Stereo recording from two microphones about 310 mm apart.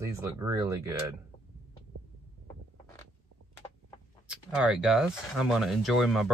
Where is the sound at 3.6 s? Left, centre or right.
Centre.